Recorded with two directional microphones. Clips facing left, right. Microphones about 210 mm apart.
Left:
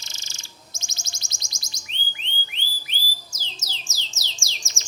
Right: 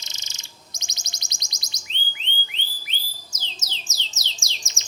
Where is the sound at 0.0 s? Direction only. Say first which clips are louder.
Even; 20° right (ahead or behind).